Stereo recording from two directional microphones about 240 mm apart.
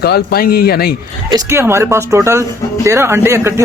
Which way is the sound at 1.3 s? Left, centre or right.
Centre.